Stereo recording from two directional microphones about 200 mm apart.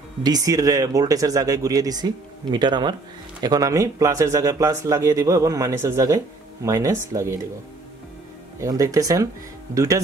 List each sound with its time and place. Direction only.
0.2 s speech: 20° right (ahead or behind)
8.5 s speech: 15° right (ahead or behind)